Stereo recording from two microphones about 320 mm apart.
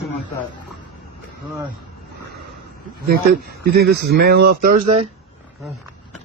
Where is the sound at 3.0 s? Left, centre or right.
Right.